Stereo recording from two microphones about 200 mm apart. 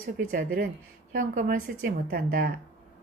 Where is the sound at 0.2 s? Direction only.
45° right (ahead or behind).